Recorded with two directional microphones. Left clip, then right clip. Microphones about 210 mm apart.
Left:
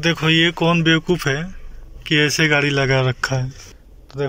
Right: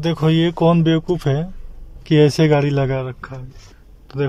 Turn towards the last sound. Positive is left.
turn(degrees=-10)  # may be behind; listen again after turning